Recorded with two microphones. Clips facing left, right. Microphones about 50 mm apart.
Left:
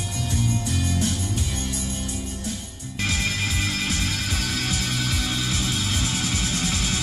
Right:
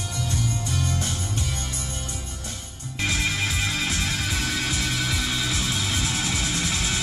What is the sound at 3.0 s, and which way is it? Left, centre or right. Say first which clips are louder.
Music: right 1 dB; right.